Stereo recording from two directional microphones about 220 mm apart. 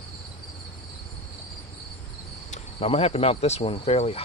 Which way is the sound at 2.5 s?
25° left (ahead or behind).